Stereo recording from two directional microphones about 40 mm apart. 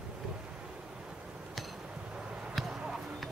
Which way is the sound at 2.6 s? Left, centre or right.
Centre.